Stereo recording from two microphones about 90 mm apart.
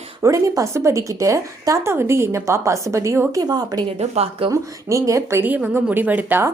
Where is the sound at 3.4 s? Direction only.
45° right (ahead or behind).